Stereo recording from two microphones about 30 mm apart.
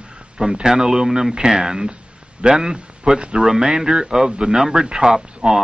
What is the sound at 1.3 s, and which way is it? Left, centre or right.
Speech, right.